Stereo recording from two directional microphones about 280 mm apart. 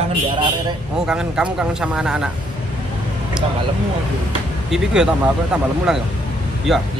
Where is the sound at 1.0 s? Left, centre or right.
Centre.